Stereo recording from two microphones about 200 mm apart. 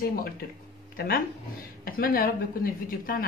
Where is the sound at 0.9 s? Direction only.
45° left (ahead or behind).